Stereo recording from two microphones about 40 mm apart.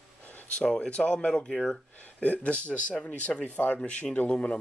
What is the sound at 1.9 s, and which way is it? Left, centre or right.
A man's voice, left.